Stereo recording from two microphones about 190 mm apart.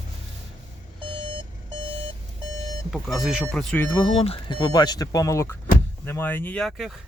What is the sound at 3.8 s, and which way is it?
Speech, 25° left (ahead or behind).